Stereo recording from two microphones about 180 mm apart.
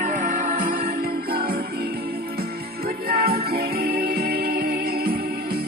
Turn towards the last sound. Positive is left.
turn(degrees=-60)  # may be behind; listen again after turning